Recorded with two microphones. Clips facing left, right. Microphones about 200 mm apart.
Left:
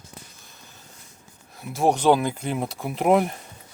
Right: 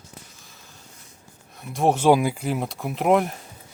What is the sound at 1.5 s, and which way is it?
Speech, centre (ahead or behind).